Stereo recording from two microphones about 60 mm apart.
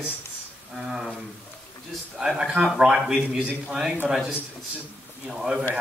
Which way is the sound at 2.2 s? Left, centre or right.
Centre.